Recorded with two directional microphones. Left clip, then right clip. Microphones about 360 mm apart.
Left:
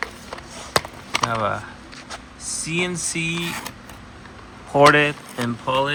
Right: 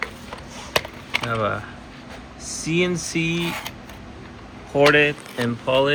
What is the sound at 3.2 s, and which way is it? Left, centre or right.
Speech, centre.